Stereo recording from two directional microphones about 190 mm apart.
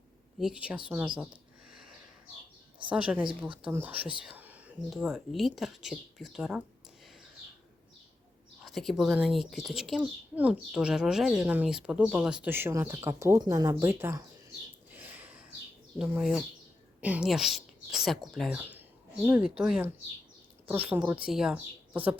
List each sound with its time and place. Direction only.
0.3 s speech: 5° right (ahead or behind)
0.9 s a sound: 5° right (ahead or behind)
2.9 s speech: 5° right (ahead or behind)
7.0 s a sound: centre (ahead or behind)
8.6 s speech: centre (ahead or behind)
14.8 s a sound: 10° right (ahead or behind)
16.0 s speech: centre (ahead or behind)
21.0 s speech: 20° right (ahead or behind)
21.2 s speech: 5° right (ahead or behind)